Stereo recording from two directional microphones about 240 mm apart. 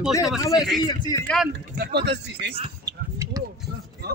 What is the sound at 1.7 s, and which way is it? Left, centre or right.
Speech, right.